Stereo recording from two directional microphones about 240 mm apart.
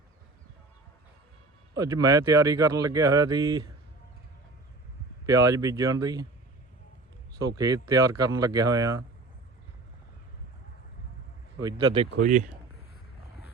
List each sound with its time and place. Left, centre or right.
1.7 s speech: centre
5.2 s speech: centre
7.4 s speech: centre
11.6 s speech: centre
12.1 s speech: right